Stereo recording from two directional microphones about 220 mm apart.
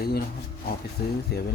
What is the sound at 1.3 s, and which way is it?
Speech, 50° left (ahead or behind).